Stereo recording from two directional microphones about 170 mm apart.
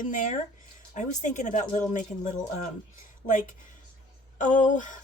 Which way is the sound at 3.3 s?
50° left (ahead or behind).